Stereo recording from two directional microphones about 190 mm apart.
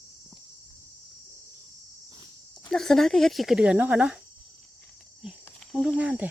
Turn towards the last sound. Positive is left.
turn(degrees=-5)  # may be behind; listen again after turning